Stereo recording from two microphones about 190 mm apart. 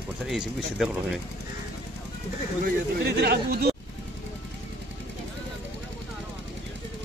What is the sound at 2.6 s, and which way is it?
Speech, 60° right (ahead or behind).